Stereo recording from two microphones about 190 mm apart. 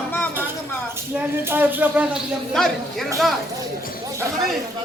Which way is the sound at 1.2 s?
10° right (ahead or behind).